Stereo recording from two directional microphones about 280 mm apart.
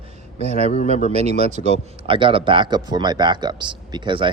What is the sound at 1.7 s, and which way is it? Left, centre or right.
Speech, centre.